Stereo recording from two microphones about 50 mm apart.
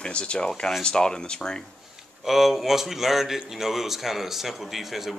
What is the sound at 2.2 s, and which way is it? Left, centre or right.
Speech, centre.